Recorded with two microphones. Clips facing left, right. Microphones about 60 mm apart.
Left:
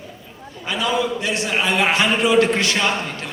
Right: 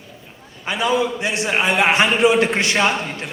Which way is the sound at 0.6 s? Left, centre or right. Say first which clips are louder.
Right 2 dB; right.